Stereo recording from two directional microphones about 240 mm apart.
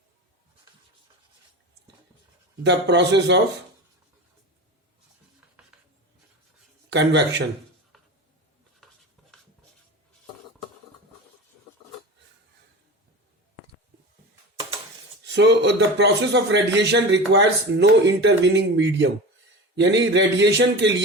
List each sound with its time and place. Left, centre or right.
2.6 s speech: right
5.6 s rub: centre
6.9 s speech: right
7.9 s a sound: centre
15.3 s speech: right